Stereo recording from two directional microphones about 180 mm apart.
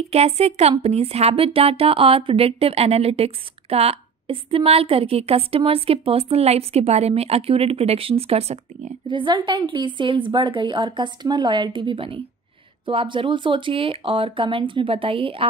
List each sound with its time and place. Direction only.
0.1 s speech: 35° right (ahead or behind)
9.0 s a woman's voice: 25° right (ahead or behind)